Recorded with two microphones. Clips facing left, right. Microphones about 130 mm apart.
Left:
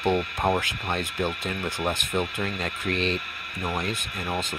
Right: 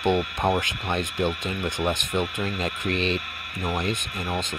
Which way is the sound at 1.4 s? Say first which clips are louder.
Right 2 dB; 5° left (ahead or behind).